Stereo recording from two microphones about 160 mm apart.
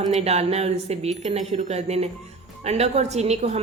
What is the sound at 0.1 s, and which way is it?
A woman's voice, 40° right (ahead or behind).